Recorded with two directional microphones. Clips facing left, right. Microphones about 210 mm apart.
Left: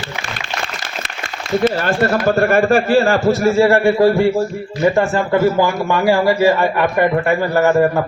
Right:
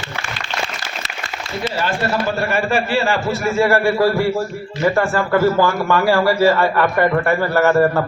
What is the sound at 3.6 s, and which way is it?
A man's voice, 25° left (ahead or behind).